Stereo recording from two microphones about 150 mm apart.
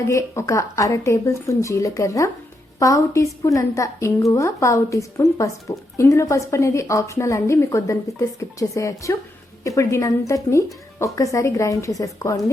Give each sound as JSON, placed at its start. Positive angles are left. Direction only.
{"t": 0.0, "sound": "a woman's voice", "side_deg": 20}